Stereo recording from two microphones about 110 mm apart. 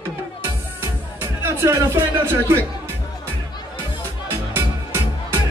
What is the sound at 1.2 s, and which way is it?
Speech, 25° right (ahead or behind).